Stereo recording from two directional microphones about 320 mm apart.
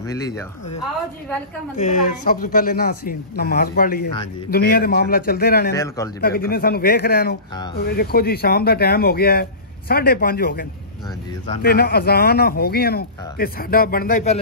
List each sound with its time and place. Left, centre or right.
1.8 s speech: left